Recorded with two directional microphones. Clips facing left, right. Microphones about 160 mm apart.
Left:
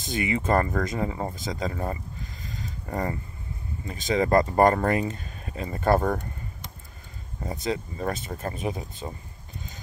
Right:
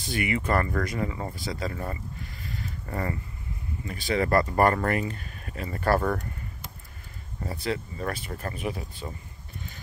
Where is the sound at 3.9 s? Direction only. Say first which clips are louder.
Left 2 dB; 20° left (ahead or behind).